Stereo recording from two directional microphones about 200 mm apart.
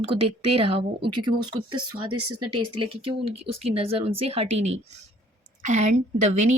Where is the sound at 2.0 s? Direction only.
90° right.